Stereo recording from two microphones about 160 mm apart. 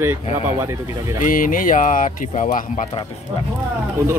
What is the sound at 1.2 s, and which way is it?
Speech, 60° left (ahead or behind).